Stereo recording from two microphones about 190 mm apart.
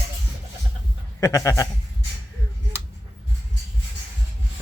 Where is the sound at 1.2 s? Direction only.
15° left (ahead or behind).